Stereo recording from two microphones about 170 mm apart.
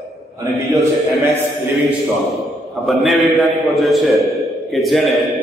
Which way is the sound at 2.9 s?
Centre (ahead or behind).